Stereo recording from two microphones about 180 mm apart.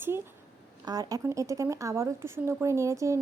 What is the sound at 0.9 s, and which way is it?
Speech, 20° right (ahead or behind).